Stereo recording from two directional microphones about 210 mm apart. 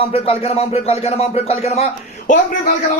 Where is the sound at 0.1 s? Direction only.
30° left (ahead or behind).